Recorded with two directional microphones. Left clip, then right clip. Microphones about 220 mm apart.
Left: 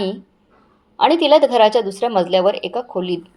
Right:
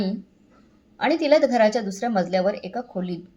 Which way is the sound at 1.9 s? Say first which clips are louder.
Left 7 dB; 65° left (ahead or behind).